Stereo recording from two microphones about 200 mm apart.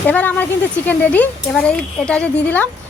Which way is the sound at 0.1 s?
10° left (ahead or behind).